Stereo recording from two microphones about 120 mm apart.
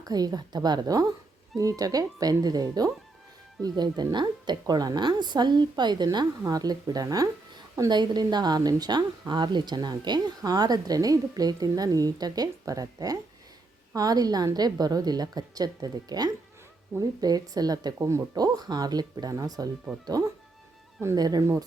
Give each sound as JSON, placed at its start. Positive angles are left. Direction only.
{"t": 0.0, "sound": "a woman's voice", "side_deg": -35}